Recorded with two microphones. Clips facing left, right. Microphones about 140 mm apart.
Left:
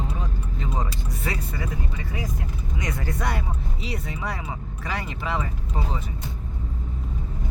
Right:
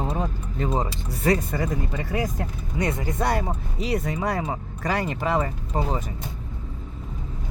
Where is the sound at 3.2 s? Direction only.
40° right (ahead or behind).